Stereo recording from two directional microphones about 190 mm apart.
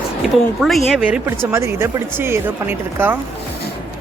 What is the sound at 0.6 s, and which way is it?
Speech, centre (ahead or behind).